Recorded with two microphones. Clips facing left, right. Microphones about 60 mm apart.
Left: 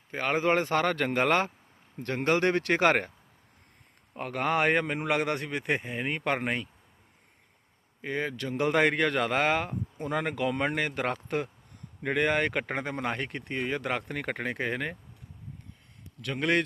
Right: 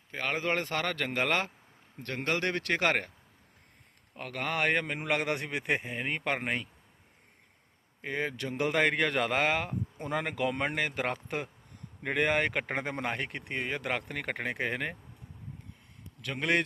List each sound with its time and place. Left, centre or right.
0.1 s a man's voice: centre
4.1 s speech: left
4.9 s speech: centre
8.0 s speech: centre
16.2 s speech: centre